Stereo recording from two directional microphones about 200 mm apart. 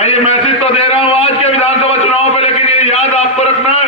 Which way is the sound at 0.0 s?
35° left (ahead or behind).